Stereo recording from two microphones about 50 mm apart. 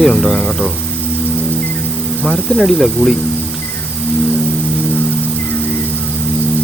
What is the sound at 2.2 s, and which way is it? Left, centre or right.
Speech, centre.